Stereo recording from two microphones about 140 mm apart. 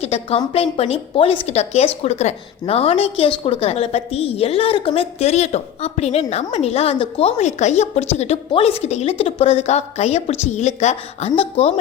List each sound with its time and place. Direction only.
0.0 s a woman's voice: 45° left (ahead or behind)